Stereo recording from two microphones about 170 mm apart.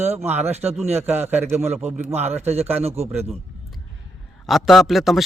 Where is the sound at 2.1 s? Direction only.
40° right (ahead or behind).